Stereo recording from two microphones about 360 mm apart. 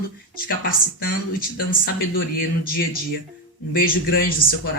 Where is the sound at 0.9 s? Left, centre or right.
Left.